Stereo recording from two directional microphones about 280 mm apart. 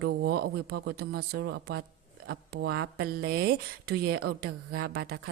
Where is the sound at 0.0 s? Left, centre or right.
Right.